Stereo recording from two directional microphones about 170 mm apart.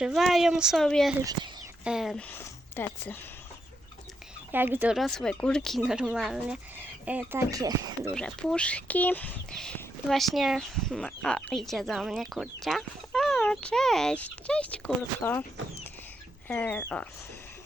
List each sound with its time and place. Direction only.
0.0 s speech: centre (ahead or behind)
4.5 s speech: 10° right (ahead or behind)
4.9 s speech: centre (ahead or behind); by 8.1 s 20° right (ahead or behind)
8.1 s speech: 5° left (ahead or behind)